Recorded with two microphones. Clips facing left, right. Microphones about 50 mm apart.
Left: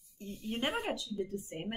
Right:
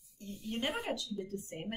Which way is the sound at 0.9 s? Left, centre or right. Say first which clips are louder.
Left 1 dB; centre.